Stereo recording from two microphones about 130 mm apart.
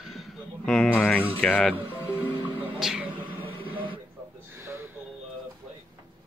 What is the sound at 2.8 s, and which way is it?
Music, 5° right (ahead or behind).